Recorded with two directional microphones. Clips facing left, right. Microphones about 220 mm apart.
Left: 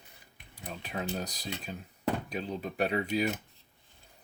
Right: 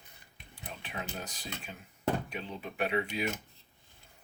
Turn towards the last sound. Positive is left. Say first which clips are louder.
# left 3 dB
turn(degrees=40)  # may be behind; listen again after turning